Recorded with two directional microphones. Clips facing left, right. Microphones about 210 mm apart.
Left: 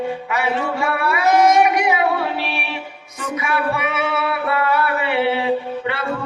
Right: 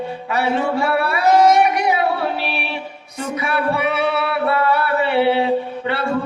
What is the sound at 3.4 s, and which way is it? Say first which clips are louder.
Music: right 2 dB; 35° right (ahead or behind).